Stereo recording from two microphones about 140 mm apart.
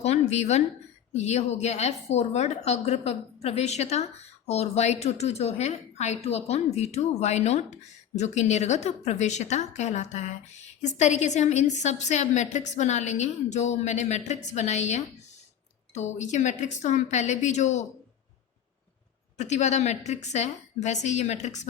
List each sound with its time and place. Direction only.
0.0 s a sound: 50° left (ahead or behind)
1.1 s a woman's voice: 55° left (ahead or behind)
16.1 s a woman's voice: 55° left (ahead or behind)
19.4 s a woman's voice: 55° left (ahead or behind)